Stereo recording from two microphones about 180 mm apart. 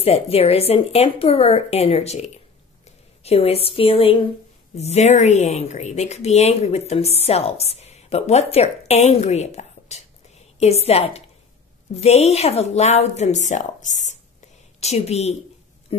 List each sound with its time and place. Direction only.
0.0 s speech: 35° left (ahead or behind)
3.3 s speech: 35° left (ahead or behind)